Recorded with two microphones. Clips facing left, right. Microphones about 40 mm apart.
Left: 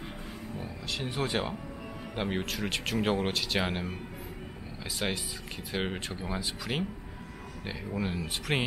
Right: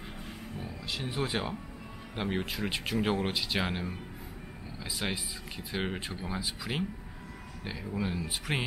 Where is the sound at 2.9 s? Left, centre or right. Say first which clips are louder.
Left 1 dB; centre.